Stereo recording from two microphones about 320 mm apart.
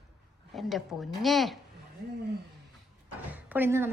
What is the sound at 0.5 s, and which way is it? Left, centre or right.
A woman's voice, centre.